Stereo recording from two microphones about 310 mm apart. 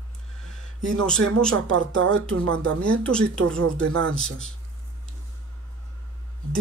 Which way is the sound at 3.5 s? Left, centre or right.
Right.